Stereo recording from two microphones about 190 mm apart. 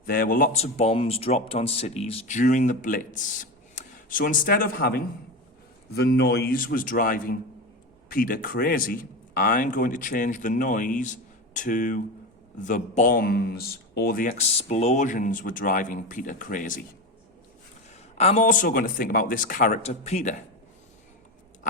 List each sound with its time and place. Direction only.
0.0 s speech: 50° left (ahead or behind)
18.2 s speech: 35° left (ahead or behind)